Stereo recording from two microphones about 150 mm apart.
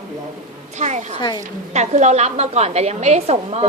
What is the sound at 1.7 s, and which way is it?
A woman's voice, 50° right (ahead or behind).